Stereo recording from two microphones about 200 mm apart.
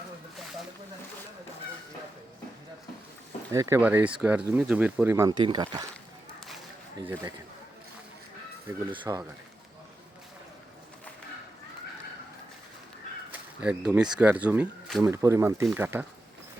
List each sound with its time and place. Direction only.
3.5 s speech: 15° right (ahead or behind)
8.9 s speech: 15° right (ahead or behind)
13.3 s speech: 5° right (ahead or behind)
15.0 s speech: 15° right (ahead or behind)